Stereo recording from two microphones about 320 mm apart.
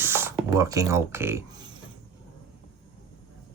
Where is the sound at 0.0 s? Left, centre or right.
Centre.